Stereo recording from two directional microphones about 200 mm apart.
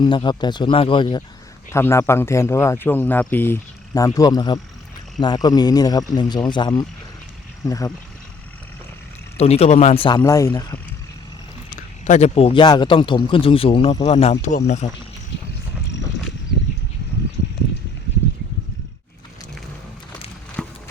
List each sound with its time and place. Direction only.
0.0 s speech: 20° left (ahead or behind)
1.7 s speech: 15° left (ahead or behind)
9.4 s speech: 30° left (ahead or behind)
10.2 s speech: 15° left (ahead or behind)
11.7 s speech: 35° left (ahead or behind)
20.6 s clip-clop: 5° left (ahead or behind)